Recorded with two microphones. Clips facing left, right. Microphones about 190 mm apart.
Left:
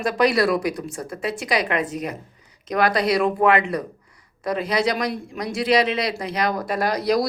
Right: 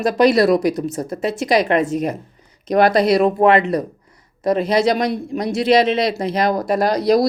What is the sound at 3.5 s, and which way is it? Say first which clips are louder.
Speech: right 5 dB; 40° right (ahead or behind).